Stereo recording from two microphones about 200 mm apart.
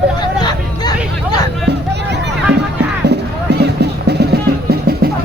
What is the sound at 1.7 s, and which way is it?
Music, 55° right (ahead or behind).